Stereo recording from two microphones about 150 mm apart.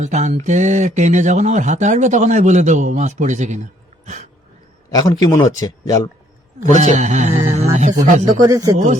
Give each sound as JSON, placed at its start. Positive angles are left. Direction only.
{"t": 0.0, "sound": "speech", "side_deg": -50}
{"t": 4.9, "sound": "a man's voice", "side_deg": 25}
{"t": 6.7, "sound": "speech", "side_deg": -55}
{"t": 8.4, "sound": "speech", "side_deg": -25}